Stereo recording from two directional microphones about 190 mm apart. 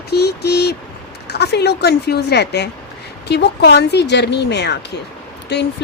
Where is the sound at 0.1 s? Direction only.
60° left (ahead or behind).